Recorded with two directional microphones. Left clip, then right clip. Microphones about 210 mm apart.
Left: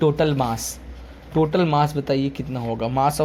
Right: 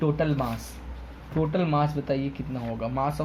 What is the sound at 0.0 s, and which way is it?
Speech, 45° left (ahead or behind).